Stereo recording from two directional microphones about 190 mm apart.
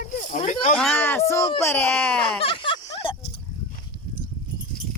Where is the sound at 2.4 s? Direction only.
25° left (ahead or behind).